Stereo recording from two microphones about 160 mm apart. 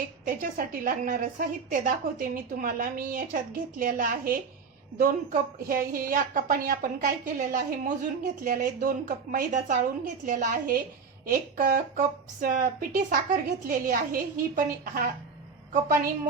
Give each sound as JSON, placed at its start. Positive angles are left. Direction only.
{"t": 0.3, "sound": "a woman's voice", "side_deg": -60}